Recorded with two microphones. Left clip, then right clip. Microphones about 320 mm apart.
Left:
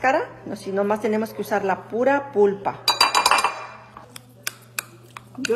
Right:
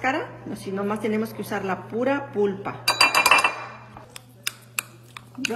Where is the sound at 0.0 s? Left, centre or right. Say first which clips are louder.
Left 5 dB; left.